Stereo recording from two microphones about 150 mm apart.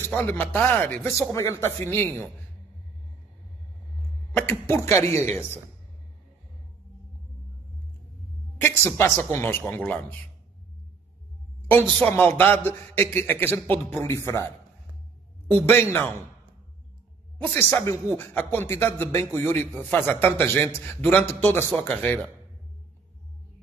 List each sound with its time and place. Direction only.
0.1 s speech: 10° left (ahead or behind)
4.4 s speech: 15° left (ahead or behind)
8.5 s speech: 15° left (ahead or behind)
11.6 s a man's voice: 10° left (ahead or behind)
15.7 s speech: 15° left (ahead or behind)
17.4 s speech: 15° left (ahead or behind)